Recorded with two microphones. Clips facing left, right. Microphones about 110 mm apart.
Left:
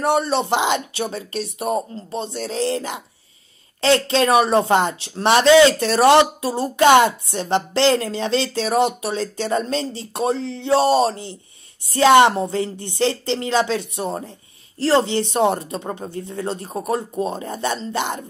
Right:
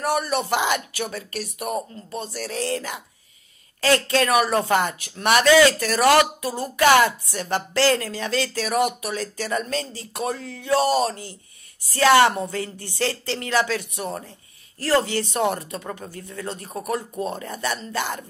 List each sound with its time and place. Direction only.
0.0 s speech: 25° left (ahead or behind)